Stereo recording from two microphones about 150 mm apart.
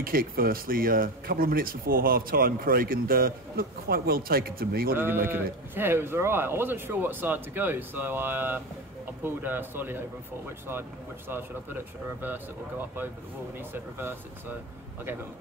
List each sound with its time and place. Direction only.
0.0 s speech: 75° right (ahead or behind)
4.9 s speech: 15° right (ahead or behind)